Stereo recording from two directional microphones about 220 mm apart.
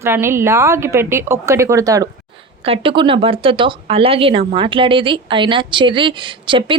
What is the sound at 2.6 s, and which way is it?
A woman's voice, 25° right (ahead or behind).